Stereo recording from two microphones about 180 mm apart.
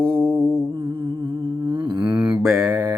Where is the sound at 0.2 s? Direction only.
10° right (ahead or behind).